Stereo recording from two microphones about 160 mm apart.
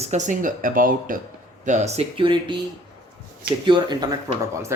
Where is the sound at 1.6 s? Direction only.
45° right (ahead or behind); by 2.6 s 30° right (ahead or behind).